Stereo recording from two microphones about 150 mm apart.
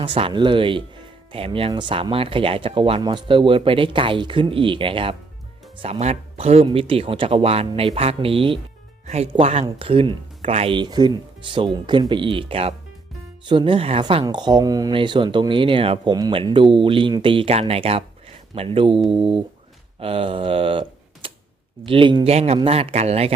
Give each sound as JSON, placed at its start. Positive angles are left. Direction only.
{"t": 0.0, "sound": "speech", "side_deg": -35}